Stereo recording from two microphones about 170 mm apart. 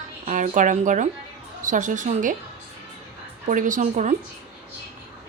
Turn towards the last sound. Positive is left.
turn(degrees=-45)  # may be behind; listen again after turning